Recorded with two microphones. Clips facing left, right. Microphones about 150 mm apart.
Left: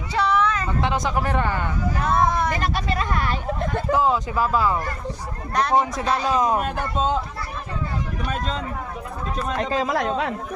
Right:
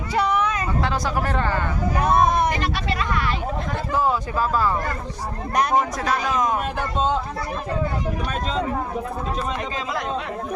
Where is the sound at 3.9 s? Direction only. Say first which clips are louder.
Even; 15° left (ahead or behind).